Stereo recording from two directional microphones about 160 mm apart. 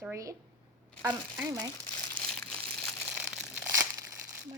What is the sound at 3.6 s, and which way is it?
Crumpling, 20° right (ahead or behind).